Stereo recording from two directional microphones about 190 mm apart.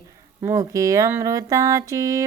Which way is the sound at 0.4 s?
15° right (ahead or behind).